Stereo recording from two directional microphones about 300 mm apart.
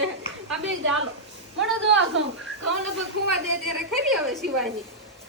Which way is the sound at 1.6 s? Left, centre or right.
Right.